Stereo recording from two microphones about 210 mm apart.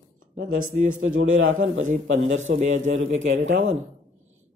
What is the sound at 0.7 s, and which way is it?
Speech, 40° right (ahead or behind).